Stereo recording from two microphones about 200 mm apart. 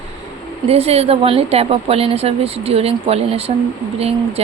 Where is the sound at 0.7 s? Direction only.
30° right (ahead or behind).